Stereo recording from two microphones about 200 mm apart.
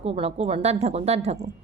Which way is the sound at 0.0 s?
30° right (ahead or behind).